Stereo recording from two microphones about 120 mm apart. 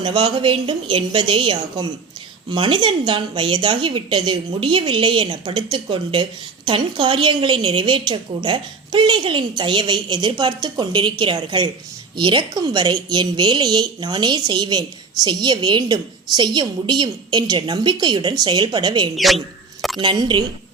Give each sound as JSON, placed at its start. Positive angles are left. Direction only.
{"t": 0.0, "sound": "a woman's voice", "side_deg": -45}
{"t": 19.1, "sound": "a man's voice", "side_deg": 0}
{"t": 20.0, "sound": "a woman's voice", "side_deg": -40}